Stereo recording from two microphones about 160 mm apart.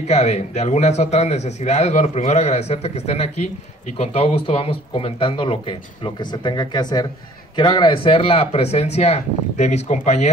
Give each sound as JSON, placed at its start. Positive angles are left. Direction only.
{"t": 0.1, "sound": "a man's voice", "side_deg": 45}